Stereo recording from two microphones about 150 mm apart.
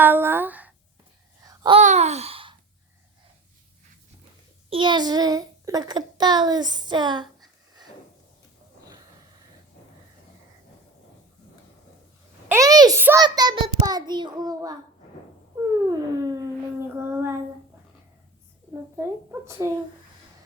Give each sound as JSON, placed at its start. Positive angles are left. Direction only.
{"t": 0.0, "sound": "speech", "side_deg": -15}
{"t": 1.4, "sound": "babbling", "side_deg": -25}
{"t": 1.8, "sound": "a sound", "side_deg": -50}
{"t": 4.7, "sound": "a child's voice", "side_deg": -30}
{"t": 12.5, "sound": "a child's voice", "side_deg": -25}
{"t": 13.0, "sound": "speech", "side_deg": -15}
{"t": 13.2, "sound": "a child's voice", "side_deg": -30}
{"t": 15.9, "sound": "child singing", "side_deg": -20}
{"t": 18.9, "sound": "speech", "side_deg": -20}